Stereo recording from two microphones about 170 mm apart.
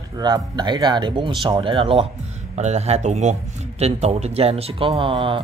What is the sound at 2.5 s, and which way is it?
A man's voice, 40° right (ahead or behind).